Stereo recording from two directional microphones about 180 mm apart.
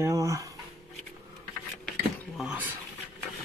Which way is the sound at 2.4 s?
5° right (ahead or behind).